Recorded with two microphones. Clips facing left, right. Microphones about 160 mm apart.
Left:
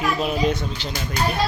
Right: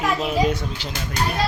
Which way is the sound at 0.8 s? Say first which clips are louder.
Left 2 dB; 10° right (ahead or behind).